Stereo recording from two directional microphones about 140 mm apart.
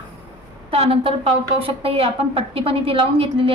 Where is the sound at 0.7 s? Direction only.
45° right (ahead or behind).